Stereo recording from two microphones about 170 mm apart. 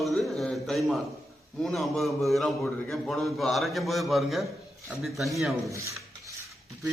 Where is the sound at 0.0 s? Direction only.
Centre (ahead or behind).